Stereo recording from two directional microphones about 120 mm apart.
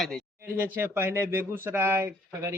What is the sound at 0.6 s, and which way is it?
A man's voice, 15° right (ahead or behind).